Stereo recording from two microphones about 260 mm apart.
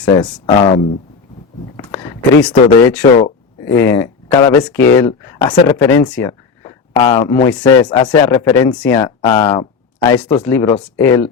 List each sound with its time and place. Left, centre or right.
0.0 s speech: centre
1.7 s speech: centre